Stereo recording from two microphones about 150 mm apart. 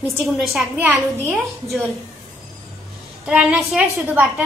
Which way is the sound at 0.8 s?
15° right (ahead or behind).